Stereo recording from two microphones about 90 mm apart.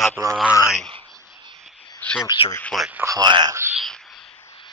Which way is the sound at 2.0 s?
20° left (ahead or behind).